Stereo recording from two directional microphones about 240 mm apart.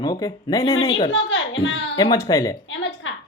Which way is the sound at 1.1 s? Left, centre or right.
Left.